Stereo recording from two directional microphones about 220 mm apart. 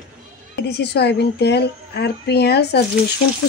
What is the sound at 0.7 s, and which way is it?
A woman's voice, 50° left (ahead or behind).